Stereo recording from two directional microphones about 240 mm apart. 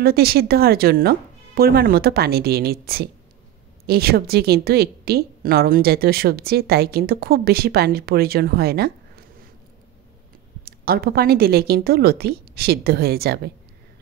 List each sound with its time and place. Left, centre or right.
0.0 s a woman's voice: right
10.6 s a woman's voice: right